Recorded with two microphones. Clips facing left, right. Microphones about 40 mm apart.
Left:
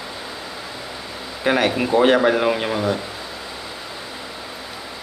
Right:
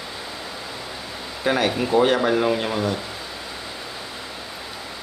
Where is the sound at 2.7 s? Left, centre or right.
Centre.